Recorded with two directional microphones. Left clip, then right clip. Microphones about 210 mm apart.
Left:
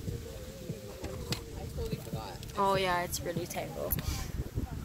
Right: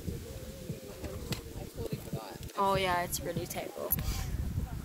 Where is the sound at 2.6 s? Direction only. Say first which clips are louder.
Even; centre (ahead or behind).